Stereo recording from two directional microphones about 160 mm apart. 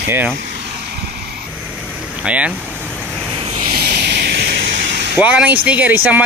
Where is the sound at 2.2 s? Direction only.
10° right (ahead or behind).